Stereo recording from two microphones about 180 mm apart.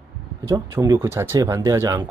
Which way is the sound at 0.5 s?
15° right (ahead or behind).